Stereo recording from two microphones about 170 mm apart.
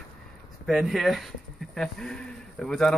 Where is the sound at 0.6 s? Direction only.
Centre (ahead or behind).